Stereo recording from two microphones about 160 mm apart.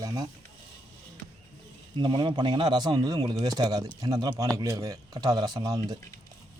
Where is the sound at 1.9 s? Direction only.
30° right (ahead or behind).